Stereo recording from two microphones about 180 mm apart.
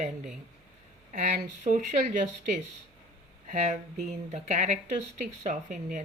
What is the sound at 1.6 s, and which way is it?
Speech, 40° right (ahead or behind).